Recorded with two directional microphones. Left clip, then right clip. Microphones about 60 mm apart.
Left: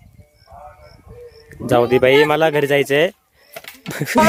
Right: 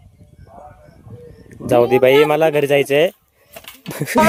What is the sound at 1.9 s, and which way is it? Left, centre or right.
Speech, centre.